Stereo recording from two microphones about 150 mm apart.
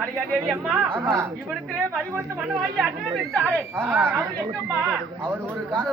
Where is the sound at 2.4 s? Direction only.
5° right (ahead or behind).